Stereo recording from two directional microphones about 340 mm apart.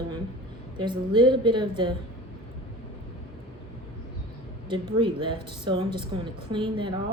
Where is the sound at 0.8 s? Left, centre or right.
Centre.